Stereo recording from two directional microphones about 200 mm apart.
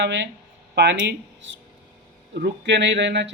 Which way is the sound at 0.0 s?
60° right (ahead or behind).